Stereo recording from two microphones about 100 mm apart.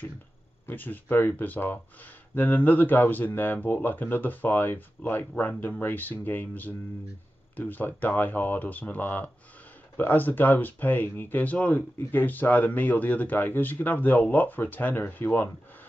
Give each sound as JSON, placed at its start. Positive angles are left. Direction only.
{"t": 0.7, "sound": "speech", "side_deg": 20}